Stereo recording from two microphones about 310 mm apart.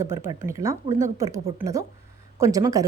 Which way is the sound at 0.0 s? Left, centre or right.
Centre.